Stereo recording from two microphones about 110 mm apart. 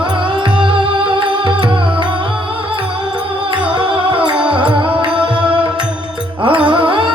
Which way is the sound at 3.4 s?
50° right (ahead or behind).